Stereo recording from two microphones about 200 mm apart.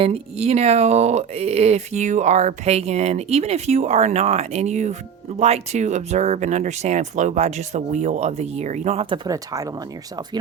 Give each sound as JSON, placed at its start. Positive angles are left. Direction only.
{"t": 0.0, "sound": "speech", "side_deg": -30}